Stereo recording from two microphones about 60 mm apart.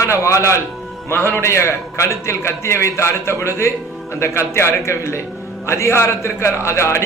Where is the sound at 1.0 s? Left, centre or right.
Left.